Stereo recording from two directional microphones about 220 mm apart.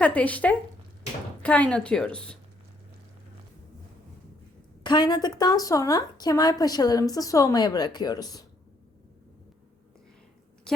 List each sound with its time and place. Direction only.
0.0 s a woman's voice: 5° left (ahead or behind)
4.8 s a woman's voice: 20° left (ahead or behind)